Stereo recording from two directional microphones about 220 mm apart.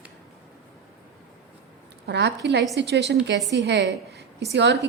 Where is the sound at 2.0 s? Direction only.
50° right (ahead or behind).